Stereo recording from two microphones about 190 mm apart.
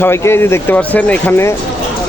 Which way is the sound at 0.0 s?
15° left (ahead or behind).